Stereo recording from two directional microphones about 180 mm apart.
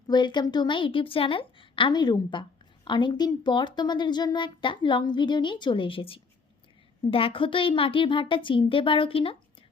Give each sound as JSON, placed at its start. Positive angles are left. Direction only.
{"t": 0.1, "sound": "a woman's voice", "side_deg": 25}